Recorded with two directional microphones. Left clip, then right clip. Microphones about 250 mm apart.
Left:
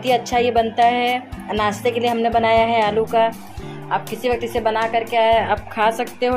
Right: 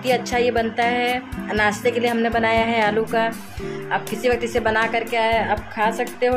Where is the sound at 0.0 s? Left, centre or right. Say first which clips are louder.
Left 2 dB; centre.